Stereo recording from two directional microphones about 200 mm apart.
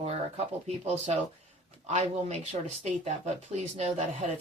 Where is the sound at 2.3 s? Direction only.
35° right (ahead or behind).